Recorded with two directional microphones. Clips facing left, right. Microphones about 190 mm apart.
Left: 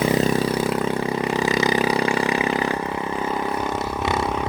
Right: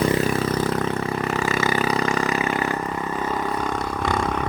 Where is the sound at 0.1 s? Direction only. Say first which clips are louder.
Left 2 dB; 15° left (ahead or behind).